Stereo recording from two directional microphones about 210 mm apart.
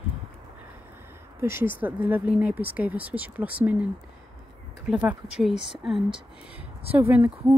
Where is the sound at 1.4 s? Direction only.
10° right (ahead or behind).